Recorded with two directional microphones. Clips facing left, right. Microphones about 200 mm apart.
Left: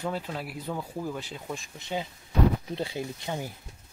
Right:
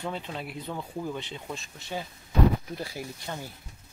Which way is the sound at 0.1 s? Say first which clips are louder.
Left 2 dB; 5° left (ahead or behind).